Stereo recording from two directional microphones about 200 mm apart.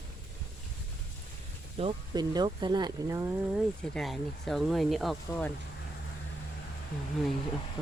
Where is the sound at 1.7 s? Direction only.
25° right (ahead or behind); by 3.6 s 10° right (ahead or behind).